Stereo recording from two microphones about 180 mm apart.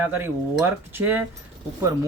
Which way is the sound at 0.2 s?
10° right (ahead or behind).